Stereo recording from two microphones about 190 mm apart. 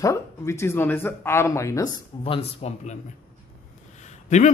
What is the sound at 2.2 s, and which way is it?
A man's voice, 30° left (ahead or behind).